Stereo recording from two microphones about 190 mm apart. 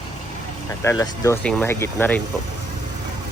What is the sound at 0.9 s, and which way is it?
Speech, 15° left (ahead or behind).